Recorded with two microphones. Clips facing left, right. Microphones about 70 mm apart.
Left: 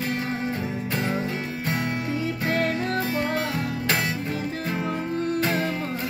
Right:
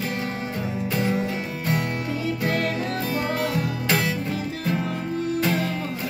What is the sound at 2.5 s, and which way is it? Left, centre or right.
Music, left.